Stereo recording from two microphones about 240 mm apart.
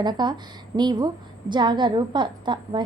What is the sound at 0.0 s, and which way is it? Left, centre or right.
A woman's voice, centre.